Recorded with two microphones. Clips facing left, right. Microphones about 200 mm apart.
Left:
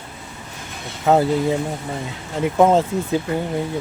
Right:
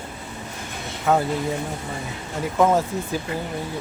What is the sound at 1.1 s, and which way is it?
Speech, 25° left (ahead or behind).